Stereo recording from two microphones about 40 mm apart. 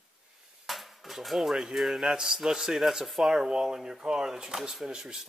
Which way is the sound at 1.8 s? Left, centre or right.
Centre.